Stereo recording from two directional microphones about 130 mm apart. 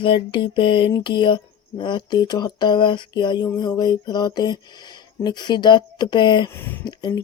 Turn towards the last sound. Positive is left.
turn(degrees=35)  # may be behind; listen again after turning